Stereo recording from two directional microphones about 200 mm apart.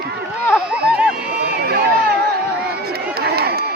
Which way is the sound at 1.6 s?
50° right (ahead or behind).